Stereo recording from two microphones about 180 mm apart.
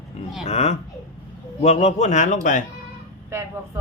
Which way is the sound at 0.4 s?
35° left (ahead or behind).